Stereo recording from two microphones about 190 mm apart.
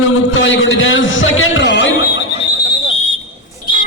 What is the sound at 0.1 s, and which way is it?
A man's voice, 85° left.